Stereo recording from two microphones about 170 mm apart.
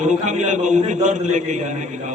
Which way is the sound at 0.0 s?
45° right (ahead or behind).